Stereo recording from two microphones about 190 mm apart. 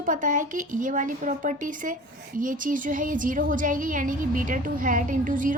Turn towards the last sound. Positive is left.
turn(degrees=-45)  # may be behind; listen again after turning